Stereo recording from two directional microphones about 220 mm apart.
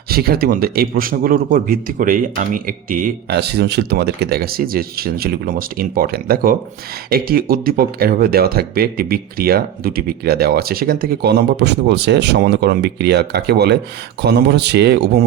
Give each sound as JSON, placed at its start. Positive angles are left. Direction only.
{"t": 0.1, "sound": "speech", "side_deg": -45}